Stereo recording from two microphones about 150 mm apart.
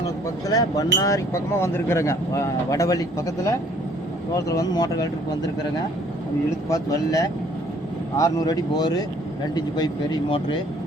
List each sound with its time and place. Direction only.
0.4 s speech: 25° left (ahead or behind)
6.7 s speech: 25° left (ahead or behind)